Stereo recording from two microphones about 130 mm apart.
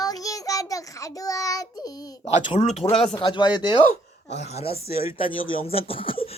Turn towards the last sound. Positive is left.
turn(degrees=45)  # may be behind; listen again after turning